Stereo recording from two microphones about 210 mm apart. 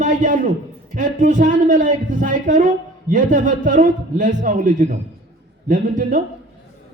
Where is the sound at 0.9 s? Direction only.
40° right (ahead or behind).